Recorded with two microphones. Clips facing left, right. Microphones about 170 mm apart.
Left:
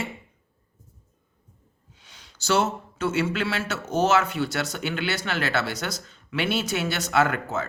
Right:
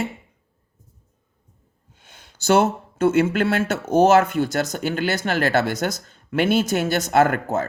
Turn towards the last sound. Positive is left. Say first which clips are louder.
# right 5 dB
turn(degrees=-50)  # may be behind; listen again after turning